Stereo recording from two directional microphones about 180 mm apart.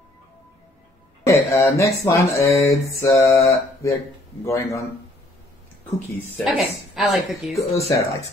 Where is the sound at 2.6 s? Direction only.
15° left (ahead or behind).